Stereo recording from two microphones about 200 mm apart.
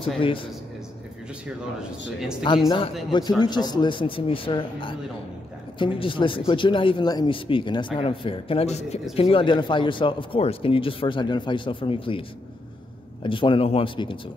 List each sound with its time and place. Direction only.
0.2 s speech: 25° left (ahead or behind)
2.4 s speech: 25° left (ahead or behind)